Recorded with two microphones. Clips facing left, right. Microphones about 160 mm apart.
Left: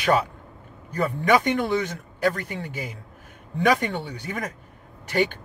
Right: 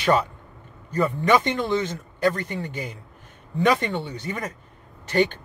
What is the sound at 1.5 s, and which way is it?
A man's voice, 10° left (ahead or behind).